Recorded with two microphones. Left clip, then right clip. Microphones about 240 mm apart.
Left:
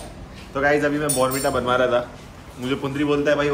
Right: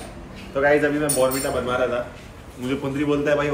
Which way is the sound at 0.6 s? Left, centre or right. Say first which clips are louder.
Right 1 dB; centre.